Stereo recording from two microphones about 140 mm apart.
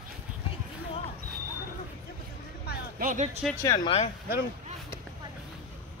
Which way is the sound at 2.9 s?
80° right.